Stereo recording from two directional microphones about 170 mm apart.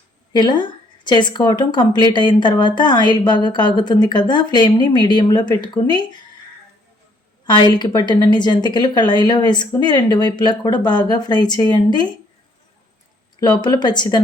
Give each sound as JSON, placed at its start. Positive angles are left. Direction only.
{"t": 0.3, "sound": "a woman's voice", "side_deg": 25}
{"t": 7.4, "sound": "a woman's voice", "side_deg": 25}
{"t": 13.4, "sound": "a woman's voice", "side_deg": 25}